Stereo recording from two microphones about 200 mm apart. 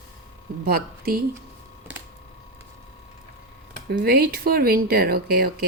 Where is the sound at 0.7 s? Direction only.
50° right (ahead or behind).